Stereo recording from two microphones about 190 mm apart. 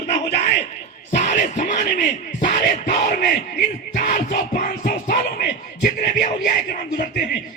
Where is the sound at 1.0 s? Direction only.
40° left (ahead or behind); by 7.4 s 55° left (ahead or behind).